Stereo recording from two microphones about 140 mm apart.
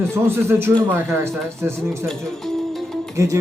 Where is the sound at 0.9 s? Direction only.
20° right (ahead or behind).